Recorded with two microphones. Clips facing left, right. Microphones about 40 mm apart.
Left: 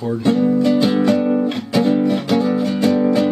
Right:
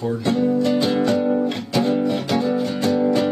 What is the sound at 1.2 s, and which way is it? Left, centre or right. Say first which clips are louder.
Music: left 2 dB; left.